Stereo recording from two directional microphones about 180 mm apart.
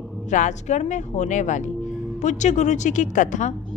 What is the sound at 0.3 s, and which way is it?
A woman's voice, 40° left (ahead or behind).